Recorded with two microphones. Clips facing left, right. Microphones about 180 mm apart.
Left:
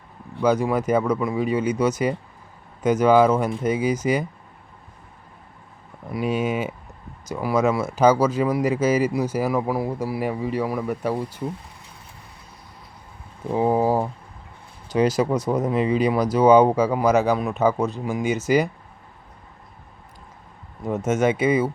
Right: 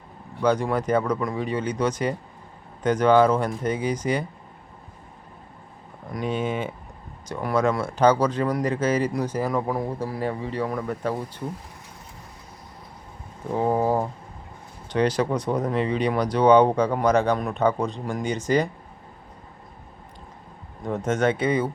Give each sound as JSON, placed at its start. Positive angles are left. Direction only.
{"t": 0.4, "sound": "speech", "side_deg": 10}
{"t": 6.1, "sound": "speech", "side_deg": 10}
{"t": 13.5, "sound": "speech", "side_deg": 10}
{"t": 20.8, "sound": "speech", "side_deg": 5}